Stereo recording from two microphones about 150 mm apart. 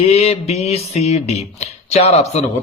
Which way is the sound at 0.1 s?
45° left (ahead or behind).